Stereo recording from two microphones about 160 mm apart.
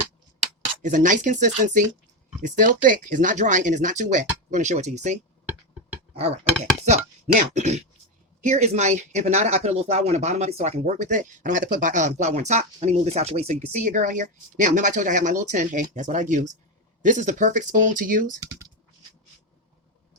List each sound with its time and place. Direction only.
0.8 s speech: 55° right (ahead or behind)
18.3 s speech: 20° right (ahead or behind)